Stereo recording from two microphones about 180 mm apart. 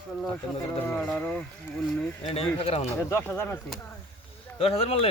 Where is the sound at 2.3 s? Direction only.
35° left (ahead or behind).